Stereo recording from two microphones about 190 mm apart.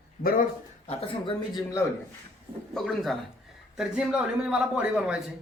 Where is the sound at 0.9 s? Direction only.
30° left (ahead or behind).